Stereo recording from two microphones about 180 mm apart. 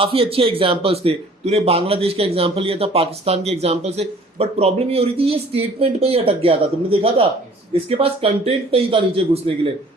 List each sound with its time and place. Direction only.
0.0 s speech: 30° right (ahead or behind)